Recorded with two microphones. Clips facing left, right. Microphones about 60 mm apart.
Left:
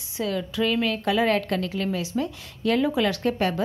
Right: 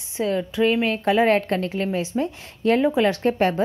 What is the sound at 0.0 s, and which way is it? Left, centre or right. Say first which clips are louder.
A woman's voice: right 4 dB; right.